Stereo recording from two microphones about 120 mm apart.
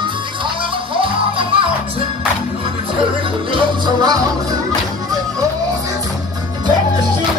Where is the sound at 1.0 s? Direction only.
50° right (ahead or behind).